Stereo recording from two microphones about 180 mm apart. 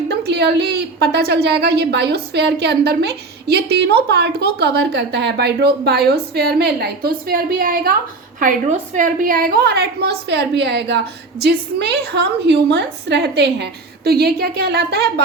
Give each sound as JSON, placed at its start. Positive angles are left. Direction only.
{"t": 0.3, "sound": "a woman's voice", "side_deg": -65}
{"t": 8.4, "sound": "a woman's voice", "side_deg": -40}
{"t": 9.2, "sound": "a woman's voice", "side_deg": -55}